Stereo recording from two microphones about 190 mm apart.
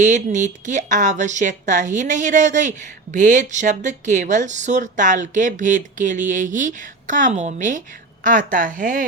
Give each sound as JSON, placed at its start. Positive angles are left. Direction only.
{"t": 0.0, "sound": "a woman's voice", "side_deg": -40}